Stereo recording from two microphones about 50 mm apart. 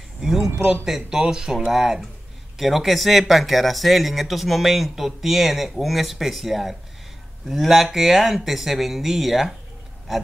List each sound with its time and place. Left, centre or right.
0.2 s speech: centre